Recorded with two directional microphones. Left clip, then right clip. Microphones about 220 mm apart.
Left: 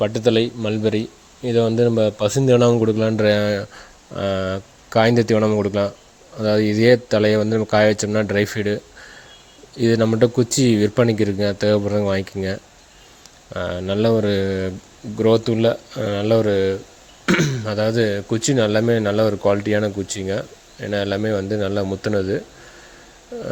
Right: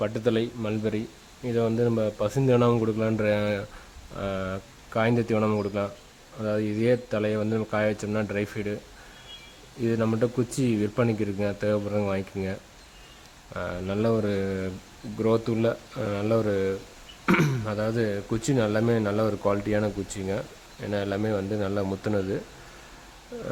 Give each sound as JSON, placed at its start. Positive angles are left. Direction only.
{"t": 0.0, "sound": "speech", "side_deg": 15}
{"t": 9.8, "sound": "speech", "side_deg": 20}